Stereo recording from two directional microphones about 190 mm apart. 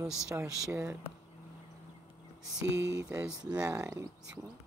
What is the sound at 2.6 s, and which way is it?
Speech, 70° right (ahead or behind).